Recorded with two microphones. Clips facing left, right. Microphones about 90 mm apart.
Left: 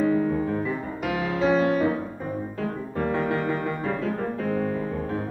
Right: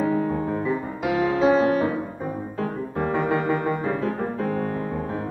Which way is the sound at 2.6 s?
15° right (ahead or behind).